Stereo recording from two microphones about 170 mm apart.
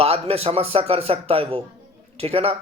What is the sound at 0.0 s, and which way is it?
A man's voice, 35° right (ahead or behind).